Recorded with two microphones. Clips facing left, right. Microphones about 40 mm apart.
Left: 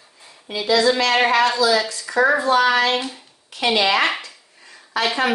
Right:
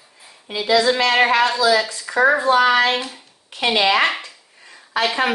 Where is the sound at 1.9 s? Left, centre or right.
Right.